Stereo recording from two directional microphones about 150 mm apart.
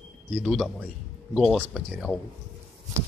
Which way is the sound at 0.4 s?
Centre (ahead or behind).